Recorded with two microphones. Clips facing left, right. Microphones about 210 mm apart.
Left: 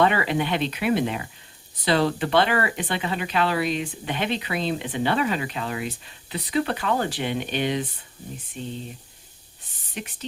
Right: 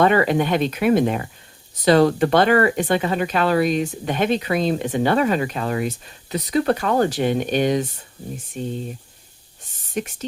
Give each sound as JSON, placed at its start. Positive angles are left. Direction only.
{"t": 0.0, "sound": "speech", "side_deg": -45}
{"t": 9.9, "sound": "speech", "side_deg": -45}